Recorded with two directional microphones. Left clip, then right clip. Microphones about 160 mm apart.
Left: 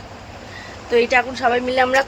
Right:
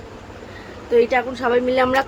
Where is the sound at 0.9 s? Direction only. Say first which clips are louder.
Left 1 dB; centre (ahead or behind).